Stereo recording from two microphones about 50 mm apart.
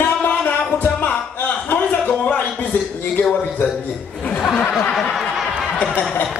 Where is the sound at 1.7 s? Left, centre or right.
Left.